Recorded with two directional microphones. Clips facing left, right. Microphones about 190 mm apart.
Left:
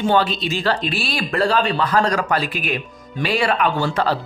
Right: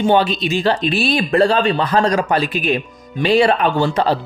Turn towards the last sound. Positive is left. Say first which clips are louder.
# right 4 dB
turn(degrees=-20)  # may be behind; listen again after turning